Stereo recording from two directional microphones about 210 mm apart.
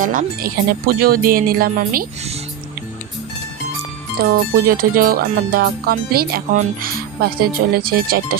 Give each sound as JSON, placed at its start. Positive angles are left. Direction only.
{"t": 0.0, "sound": "music", "side_deg": -40}
{"t": 4.2, "sound": "music", "side_deg": -45}